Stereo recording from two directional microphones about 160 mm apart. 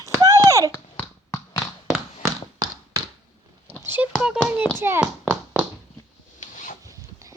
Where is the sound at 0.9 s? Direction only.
15° left (ahead or behind).